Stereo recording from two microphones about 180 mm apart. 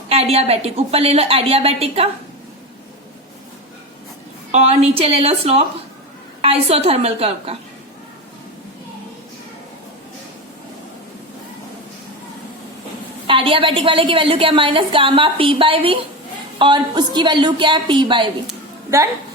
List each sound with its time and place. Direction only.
0.1 s a woman's voice: 35° right (ahead or behind)
4.5 s a woman's voice: 35° right (ahead or behind)
13.2 s a woman's voice: 30° right (ahead or behind)